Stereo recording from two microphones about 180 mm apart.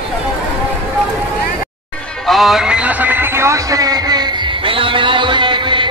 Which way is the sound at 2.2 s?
Centre (ahead or behind).